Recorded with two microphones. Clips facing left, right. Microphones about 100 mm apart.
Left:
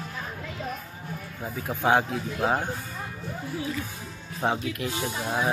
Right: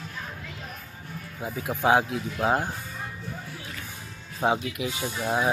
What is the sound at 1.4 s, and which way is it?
Speech, 10° right (ahead or behind).